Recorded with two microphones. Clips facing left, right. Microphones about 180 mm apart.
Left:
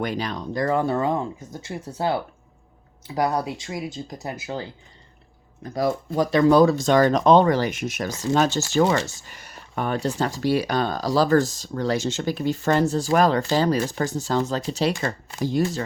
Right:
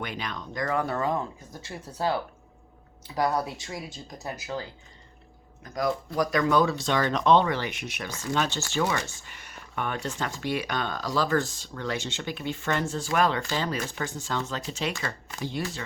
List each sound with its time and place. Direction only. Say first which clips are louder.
0.0 s speech: left 8 dB; 35° left (ahead or behind)
5.6 s speech: left 4 dB; 30° left (ahead or behind)